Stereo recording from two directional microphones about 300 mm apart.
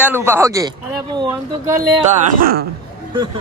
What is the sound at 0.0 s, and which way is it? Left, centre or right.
Speech, centre.